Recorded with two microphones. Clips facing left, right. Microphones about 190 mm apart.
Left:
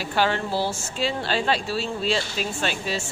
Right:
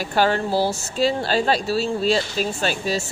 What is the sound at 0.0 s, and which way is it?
Speech, 45° right (ahead or behind).